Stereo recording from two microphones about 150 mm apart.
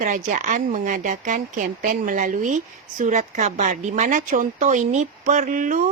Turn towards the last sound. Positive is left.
turn(degrees=-60)  # may be behind; listen again after turning